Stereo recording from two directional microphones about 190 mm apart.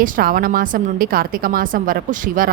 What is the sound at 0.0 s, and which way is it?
A woman's voice, 50° right (ahead or behind).